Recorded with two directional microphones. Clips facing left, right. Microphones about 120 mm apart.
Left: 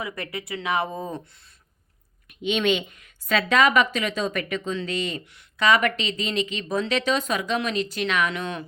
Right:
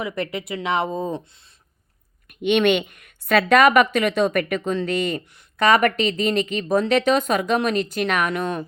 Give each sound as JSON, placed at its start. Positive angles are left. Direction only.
{"t": 0.0, "sound": "speech", "side_deg": -25}
{"t": 2.4, "sound": "speech", "side_deg": -60}